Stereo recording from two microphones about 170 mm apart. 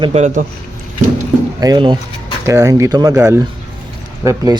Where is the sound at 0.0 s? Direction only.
40° right (ahead or behind).